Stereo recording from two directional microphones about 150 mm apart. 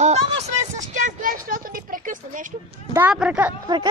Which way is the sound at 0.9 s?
60° right (ahead or behind).